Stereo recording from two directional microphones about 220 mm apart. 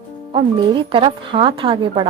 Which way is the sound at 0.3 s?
20° right (ahead or behind).